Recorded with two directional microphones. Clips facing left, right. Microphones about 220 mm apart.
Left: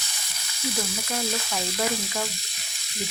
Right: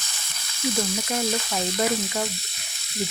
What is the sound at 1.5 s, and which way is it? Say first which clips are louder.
Speech: right 3 dB; 15° right (ahead or behind).